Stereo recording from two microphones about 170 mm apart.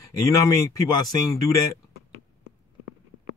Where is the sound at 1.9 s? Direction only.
85° right.